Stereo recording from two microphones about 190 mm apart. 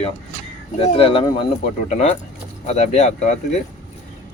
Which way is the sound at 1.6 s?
40° left (ahead or behind).